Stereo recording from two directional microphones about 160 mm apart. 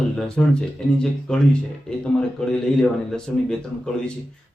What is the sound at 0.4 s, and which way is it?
Speech, 5° left (ahead or behind).